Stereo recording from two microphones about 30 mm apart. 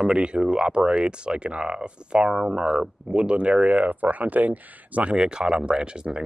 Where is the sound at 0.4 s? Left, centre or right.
Right.